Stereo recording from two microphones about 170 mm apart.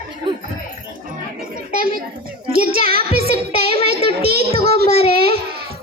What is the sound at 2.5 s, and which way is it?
Child singing, 60° right (ahead or behind).